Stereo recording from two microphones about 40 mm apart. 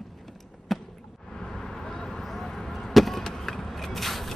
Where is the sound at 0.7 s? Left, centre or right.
Centre.